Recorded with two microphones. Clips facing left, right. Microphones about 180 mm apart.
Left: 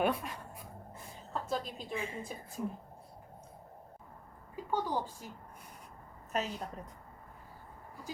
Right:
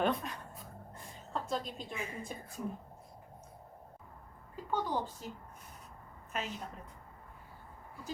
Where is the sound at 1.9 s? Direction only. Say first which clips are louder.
Left 5 dB; 30° left (ahead or behind).